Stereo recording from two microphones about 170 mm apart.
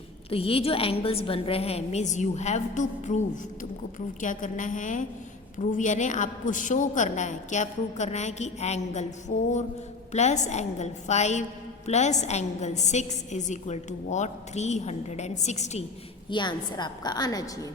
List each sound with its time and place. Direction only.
0.3 s a woman's voice: 35° left (ahead or behind)
4.2 s a woman's voice: 50° left (ahead or behind)
16.3 s a woman's voice: 25° left (ahead or behind)